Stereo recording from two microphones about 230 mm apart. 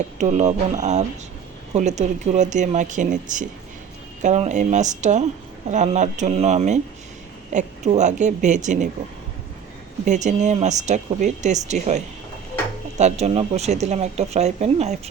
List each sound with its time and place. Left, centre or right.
0.2 s speech: right
10.1 s speech: right